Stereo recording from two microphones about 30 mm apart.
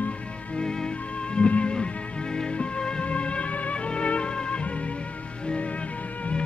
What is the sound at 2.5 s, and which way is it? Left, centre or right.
Music, left.